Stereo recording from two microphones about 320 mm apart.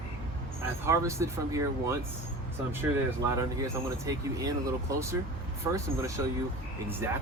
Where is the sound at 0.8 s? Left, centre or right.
Centre.